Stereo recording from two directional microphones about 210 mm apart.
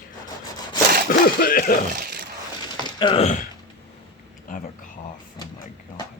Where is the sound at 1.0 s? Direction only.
45° left (ahead or behind).